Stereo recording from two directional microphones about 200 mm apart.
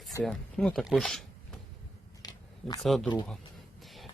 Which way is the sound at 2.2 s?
20° left (ahead or behind).